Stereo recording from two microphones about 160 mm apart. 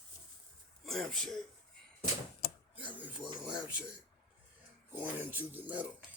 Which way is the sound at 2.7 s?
10° right (ahead or behind).